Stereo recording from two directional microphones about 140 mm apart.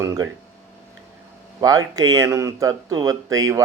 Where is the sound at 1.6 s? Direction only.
25° right (ahead or behind).